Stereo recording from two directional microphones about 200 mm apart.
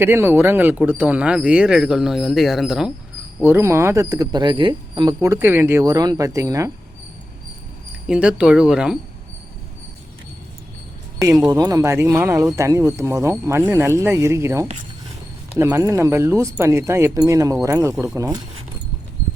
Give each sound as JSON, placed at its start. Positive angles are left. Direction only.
{"t": 0.0, "sound": "speech", "side_deg": -10}
{"t": 8.0, "sound": "speech", "side_deg": -5}
{"t": 11.2, "sound": "speech", "side_deg": -15}